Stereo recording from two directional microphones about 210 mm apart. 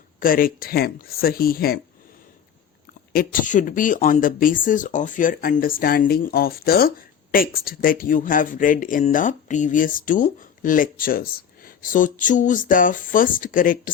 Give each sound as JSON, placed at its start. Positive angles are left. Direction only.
{"t": 0.2, "sound": "speech", "side_deg": 40}
{"t": 3.1, "sound": "speech", "side_deg": 45}